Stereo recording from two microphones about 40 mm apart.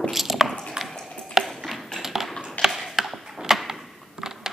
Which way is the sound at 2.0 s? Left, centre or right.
Centre.